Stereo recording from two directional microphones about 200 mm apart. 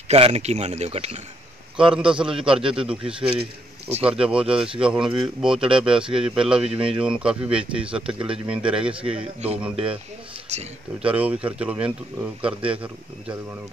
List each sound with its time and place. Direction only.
0.1 s speech: 30° right (ahead or behind)
2.1 s a man's voice: 5° right (ahead or behind)
9.1 s speech: 30° right (ahead or behind)
9.6 s a man's voice: 5° right (ahead or behind)
10.5 s speech: 35° right (ahead or behind)
11.0 s speech: 5° right (ahead or behind)